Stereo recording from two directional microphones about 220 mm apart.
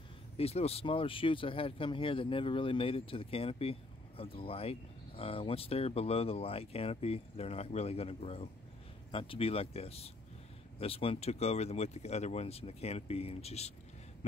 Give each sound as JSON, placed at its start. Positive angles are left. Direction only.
{"t": 0.4, "sound": "speech", "side_deg": 30}